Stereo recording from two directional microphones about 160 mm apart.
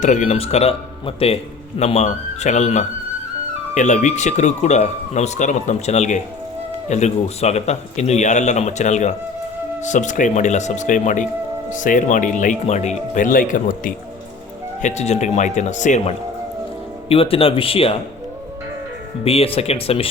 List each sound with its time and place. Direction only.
0.0 s speech: 50° left (ahead or behind)
14.8 s speech: 45° left (ahead or behind)
17.1 s speech: 35° left (ahead or behind)
19.2 s speech: 35° left (ahead or behind)